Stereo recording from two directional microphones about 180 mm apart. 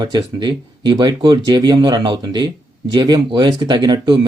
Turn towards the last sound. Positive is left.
turn(degrees=-25)  # may be behind; listen again after turning